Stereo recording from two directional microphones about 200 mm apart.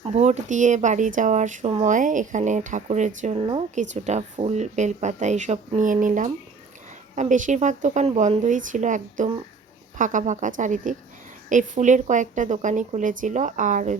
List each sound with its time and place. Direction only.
0.0 s a woman's voice: 35° right (ahead or behind)